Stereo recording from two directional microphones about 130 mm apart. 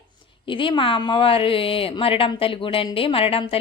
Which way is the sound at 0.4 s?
40° left (ahead or behind).